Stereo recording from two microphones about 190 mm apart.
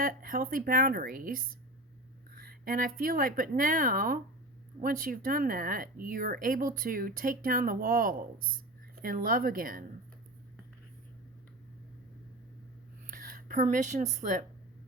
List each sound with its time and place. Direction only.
0.0 s speech: 50° right (ahead or behind)
13.1 s speech: 50° right (ahead or behind)